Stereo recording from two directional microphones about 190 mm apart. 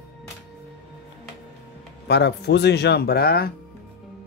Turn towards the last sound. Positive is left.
turn(degrees=55)  # may be behind; listen again after turning